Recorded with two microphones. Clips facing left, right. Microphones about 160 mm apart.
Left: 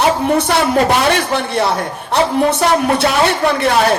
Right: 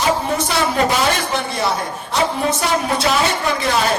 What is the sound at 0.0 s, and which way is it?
A man's voice, 60° left (ahead or behind).